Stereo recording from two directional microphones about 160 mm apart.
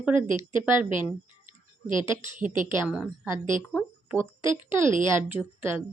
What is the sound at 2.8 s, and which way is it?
A woman's voice, 5° right (ahead or behind).